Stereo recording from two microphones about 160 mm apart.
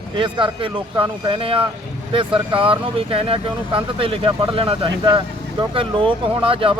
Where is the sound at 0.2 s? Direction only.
30° right (ahead or behind).